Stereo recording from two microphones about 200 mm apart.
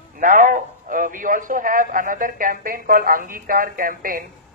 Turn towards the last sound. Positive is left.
turn(degrees=-45)  # may be behind; listen again after turning